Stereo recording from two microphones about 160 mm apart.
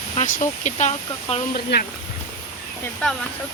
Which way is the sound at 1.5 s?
75° left (ahead or behind).